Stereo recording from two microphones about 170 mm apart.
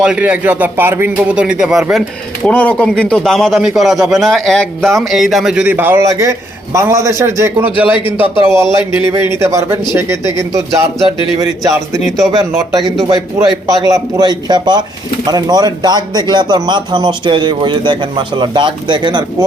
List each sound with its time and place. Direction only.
0.0 s a man's voice: 5° right (ahead or behind)
12.3 s speech: 20° right (ahead or behind)